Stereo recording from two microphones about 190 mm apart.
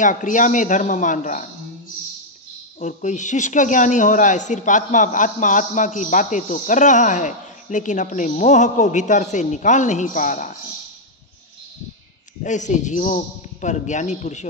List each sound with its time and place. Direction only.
0.0 s speech: 40° left (ahead or behind)
2.8 s speech: 40° left (ahead or behind)
12.4 s speech: 40° left (ahead or behind)